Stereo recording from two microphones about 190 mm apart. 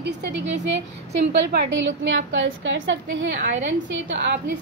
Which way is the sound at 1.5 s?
65° right (ahead or behind).